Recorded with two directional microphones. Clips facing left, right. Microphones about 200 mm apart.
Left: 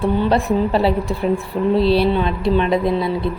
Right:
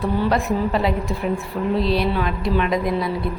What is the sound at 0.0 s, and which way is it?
A woman's voice, 30° left (ahead or behind).